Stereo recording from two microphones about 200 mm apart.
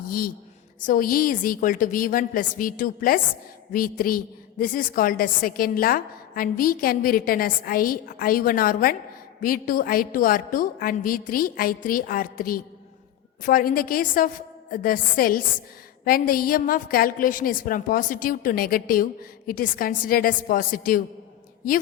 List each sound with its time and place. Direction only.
0.9 s a woman's voice: 45° left (ahead or behind)